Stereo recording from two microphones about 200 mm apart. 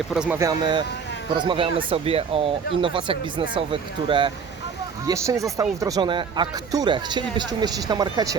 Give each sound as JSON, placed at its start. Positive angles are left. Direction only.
{"t": 0.1, "sound": "speech", "side_deg": -5}
{"t": 0.3, "sound": "speech", "side_deg": -20}